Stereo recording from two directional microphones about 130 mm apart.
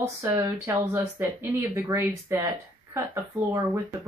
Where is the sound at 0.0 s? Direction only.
20° right (ahead or behind).